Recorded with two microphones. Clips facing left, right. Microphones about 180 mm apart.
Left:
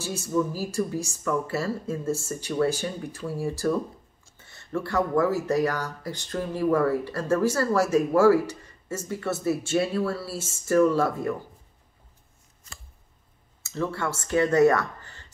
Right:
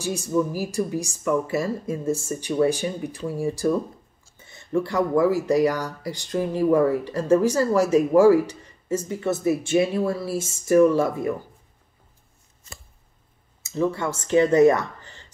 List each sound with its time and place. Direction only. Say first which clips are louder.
0.0 s speech: right 3 dB; 15° right (ahead or behind)
13.6 s speech: right 5 dB; 15° right (ahead or behind)